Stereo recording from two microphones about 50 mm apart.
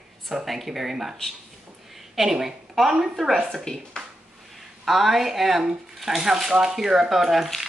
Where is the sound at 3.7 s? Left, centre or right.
Centre.